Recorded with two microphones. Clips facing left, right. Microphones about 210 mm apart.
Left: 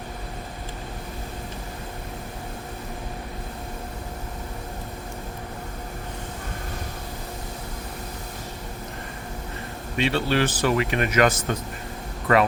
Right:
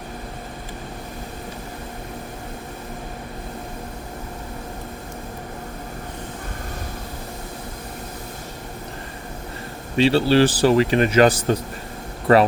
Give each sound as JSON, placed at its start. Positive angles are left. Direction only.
{"t": 10.0, "sound": "speech", "side_deg": -30}